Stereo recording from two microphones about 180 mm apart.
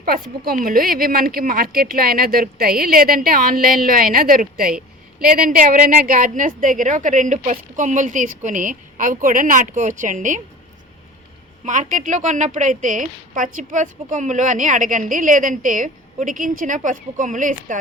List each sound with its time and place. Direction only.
0.0 s a woman's voice: 55° right (ahead or behind)
11.6 s a woman's voice: 45° right (ahead or behind)